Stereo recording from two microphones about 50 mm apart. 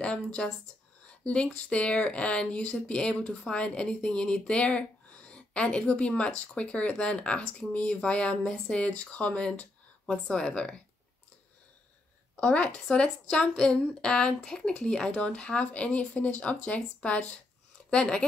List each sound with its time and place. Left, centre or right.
0.0 s speech: left
12.4 s speech: left